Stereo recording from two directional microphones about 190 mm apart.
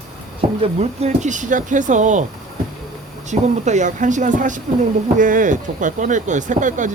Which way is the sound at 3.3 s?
40° right (ahead or behind).